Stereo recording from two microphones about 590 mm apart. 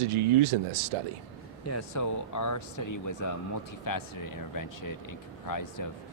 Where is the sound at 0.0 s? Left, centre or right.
Right.